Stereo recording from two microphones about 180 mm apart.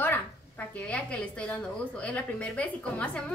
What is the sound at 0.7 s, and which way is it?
A woman's voice, 5° left (ahead or behind).